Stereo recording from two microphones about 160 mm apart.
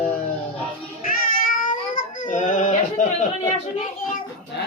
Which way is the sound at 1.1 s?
60° left (ahead or behind).